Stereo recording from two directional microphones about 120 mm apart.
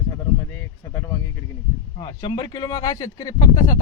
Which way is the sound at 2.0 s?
40° left (ahead or behind).